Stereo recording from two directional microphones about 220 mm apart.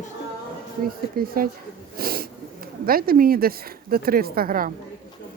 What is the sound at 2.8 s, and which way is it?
Speech, 40° right (ahead or behind).